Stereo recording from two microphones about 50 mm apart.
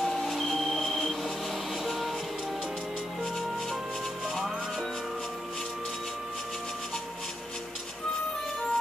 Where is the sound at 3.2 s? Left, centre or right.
Centre.